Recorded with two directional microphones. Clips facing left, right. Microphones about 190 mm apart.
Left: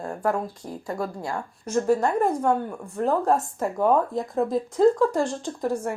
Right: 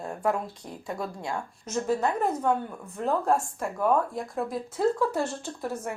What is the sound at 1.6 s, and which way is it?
Speech, 10° left (ahead or behind).